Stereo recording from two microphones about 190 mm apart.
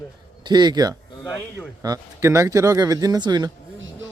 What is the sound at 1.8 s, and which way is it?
Speech, 15° right (ahead or behind).